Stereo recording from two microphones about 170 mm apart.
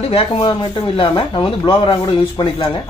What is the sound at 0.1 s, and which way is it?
Speech, 35° left (ahead or behind).